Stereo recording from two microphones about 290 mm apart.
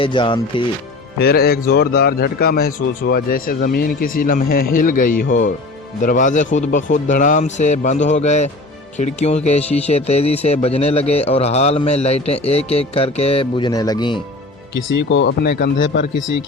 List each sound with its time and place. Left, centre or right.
0.0 s speech: centre
1.2 s a man's voice: left; by 14.2 s centre
15.1 s speech: left